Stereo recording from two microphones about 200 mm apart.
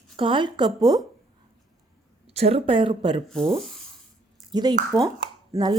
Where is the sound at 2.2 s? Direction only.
30° right (ahead or behind).